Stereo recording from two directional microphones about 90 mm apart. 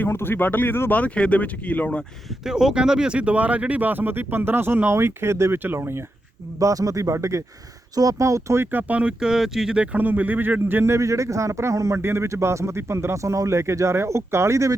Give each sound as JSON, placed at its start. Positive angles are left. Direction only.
{"t": 0.0, "sound": "speech", "side_deg": 25}
{"t": 2.4, "sound": "speech", "side_deg": -5}
{"t": 6.6, "sound": "speech", "side_deg": -40}